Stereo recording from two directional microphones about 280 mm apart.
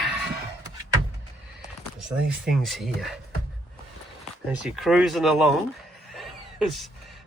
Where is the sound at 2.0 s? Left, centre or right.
Centre.